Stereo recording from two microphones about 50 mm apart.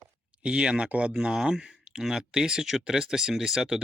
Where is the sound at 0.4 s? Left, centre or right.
Centre.